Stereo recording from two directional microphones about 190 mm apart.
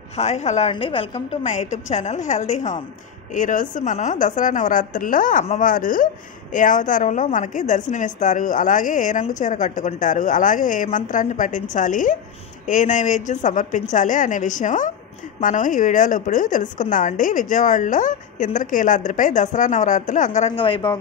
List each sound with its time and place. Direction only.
0.2 s a woman's voice: 35° left (ahead or behind)